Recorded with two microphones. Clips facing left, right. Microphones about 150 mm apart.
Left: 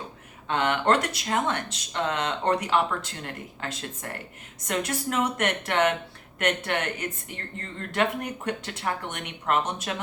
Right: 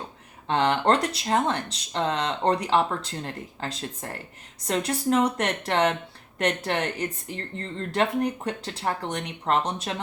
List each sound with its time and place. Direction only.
0.4 s speech: 30° right (ahead or behind)